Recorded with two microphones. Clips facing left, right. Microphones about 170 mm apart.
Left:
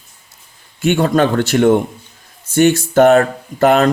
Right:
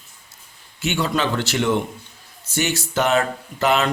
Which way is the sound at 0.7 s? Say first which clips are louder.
Left 9 dB; 50° left (ahead or behind).